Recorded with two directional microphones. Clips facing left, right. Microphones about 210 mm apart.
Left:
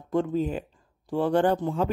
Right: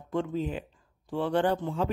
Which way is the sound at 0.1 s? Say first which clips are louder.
Left 5 dB; 40° left (ahead or behind).